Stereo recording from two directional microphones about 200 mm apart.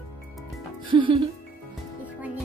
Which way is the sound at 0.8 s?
25° right (ahead or behind).